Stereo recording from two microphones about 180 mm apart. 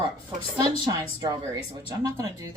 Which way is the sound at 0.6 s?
25° right (ahead or behind).